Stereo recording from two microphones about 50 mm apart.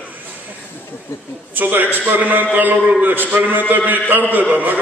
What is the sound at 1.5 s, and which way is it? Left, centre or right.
A man's voice, right.